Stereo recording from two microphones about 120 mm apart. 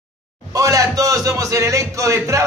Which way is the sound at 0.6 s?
30° right (ahead or behind).